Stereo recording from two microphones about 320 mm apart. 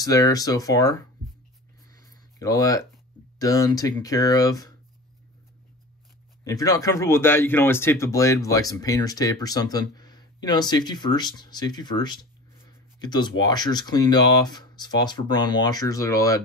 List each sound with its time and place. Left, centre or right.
0.0 s speech: centre
1.9 s a sound: centre
3.3 s speech: centre
6.4 s speech: centre